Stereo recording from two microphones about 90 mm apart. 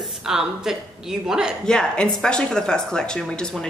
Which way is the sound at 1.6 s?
10° left (ahead or behind).